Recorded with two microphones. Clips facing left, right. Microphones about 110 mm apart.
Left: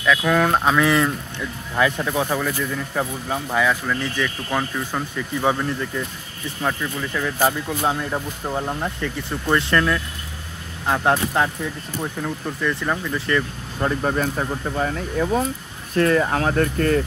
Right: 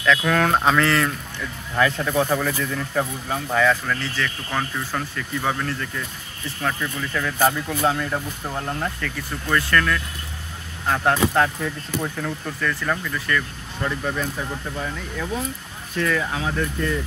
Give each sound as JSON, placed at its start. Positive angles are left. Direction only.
{"t": 0.0, "sound": "speech", "side_deg": 5}
{"t": 0.8, "sound": "speech", "side_deg": 15}
{"t": 13.8, "sound": "speech", "side_deg": 50}